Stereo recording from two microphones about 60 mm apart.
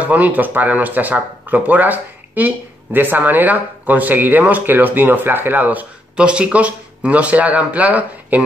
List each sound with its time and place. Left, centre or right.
0.0 s speech: right
6.1 s speech: centre